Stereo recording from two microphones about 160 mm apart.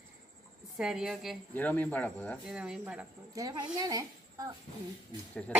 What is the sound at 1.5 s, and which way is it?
Speech, 10° left (ahead or behind).